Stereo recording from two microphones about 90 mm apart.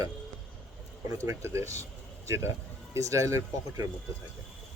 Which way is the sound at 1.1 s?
35° right (ahead or behind).